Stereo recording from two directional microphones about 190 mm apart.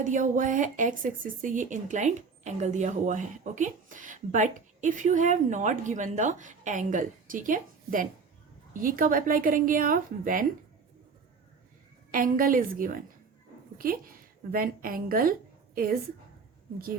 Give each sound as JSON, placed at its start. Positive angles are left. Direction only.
{"t": 0.0, "sound": "a woman's voice", "side_deg": -40}
{"t": 12.1, "sound": "a woman's voice", "side_deg": -45}